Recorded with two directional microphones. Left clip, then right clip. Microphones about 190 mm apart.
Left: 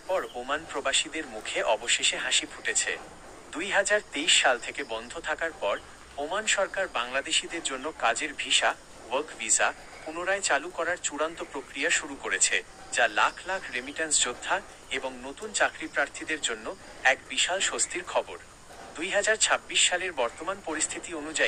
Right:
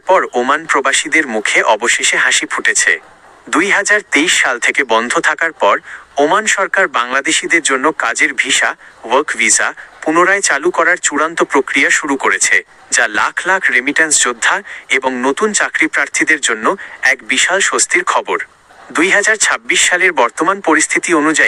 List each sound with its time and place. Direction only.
0.1 s speech: 50° right (ahead or behind)